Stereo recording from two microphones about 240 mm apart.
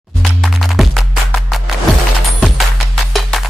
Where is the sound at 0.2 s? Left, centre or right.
Centre.